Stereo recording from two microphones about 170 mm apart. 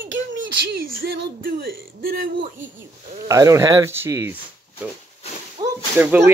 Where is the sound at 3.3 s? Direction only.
15° right (ahead or behind).